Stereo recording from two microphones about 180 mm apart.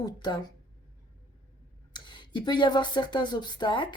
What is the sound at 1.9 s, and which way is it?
Speech, 25° left (ahead or behind).